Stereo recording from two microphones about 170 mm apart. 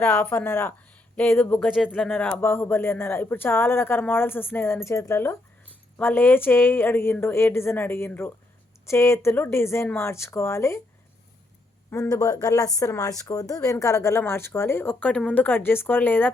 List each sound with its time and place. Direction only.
0.0 s speech: 5° left (ahead or behind)
11.9 s speech: 20° left (ahead or behind)